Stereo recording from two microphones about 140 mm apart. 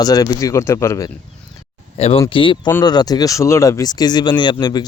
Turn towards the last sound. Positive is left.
turn(degrees=30)  # may be behind; listen again after turning